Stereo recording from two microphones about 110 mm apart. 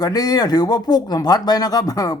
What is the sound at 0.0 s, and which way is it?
A man's voice, 35° left (ahead or behind).